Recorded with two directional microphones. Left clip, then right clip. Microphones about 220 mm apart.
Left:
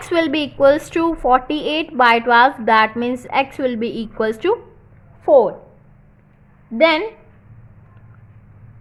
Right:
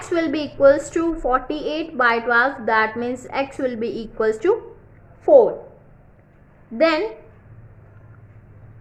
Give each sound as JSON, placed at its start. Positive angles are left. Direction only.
{"t": 0.1, "sound": "a woman's voice", "side_deg": 25}
{"t": 6.7, "sound": "a woman's voice", "side_deg": 20}